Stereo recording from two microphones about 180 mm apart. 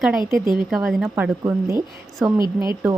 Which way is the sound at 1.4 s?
15° right (ahead or behind).